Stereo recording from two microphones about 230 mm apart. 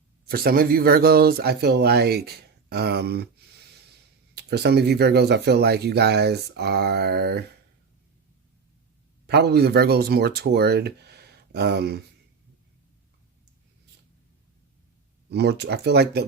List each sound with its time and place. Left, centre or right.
0.3 s speech: right
9.2 s speech: right
15.3 s speech: right